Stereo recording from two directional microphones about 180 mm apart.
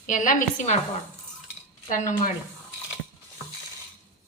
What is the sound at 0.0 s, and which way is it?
Speech, 45° left (ahead or behind).